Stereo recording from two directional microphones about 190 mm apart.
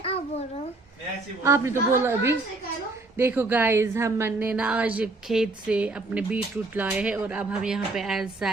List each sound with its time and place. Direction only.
0.0 s babbling: 30° left (ahead or behind)
1.5 s speech: 15° right (ahead or behind)